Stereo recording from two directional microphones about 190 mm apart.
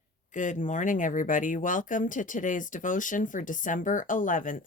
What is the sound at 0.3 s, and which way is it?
Speech, 40° left (ahead or behind).